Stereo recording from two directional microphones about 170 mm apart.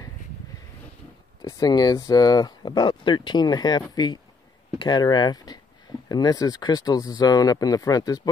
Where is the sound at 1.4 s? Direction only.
20° left (ahead or behind).